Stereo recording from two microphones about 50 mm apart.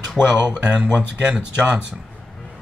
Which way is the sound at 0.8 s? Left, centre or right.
Right.